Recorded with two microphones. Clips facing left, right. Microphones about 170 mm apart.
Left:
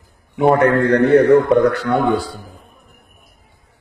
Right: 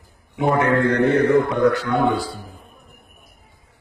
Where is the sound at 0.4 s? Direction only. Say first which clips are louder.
Left 5 dB; 60° left (ahead or behind).